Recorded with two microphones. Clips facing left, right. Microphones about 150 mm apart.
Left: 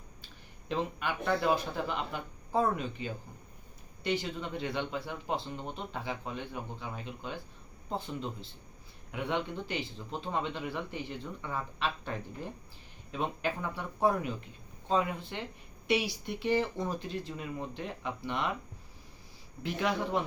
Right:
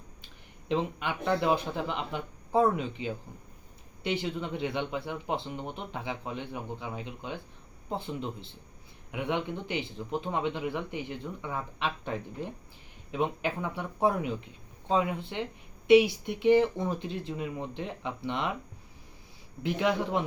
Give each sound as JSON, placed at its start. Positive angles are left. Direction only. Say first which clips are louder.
{"t": 0.7, "sound": "a man's voice", "louder": "right 3 dB", "side_deg": -20}
{"t": 19.6, "sound": "a man's voice", "louder": "right 4 dB", "side_deg": -15}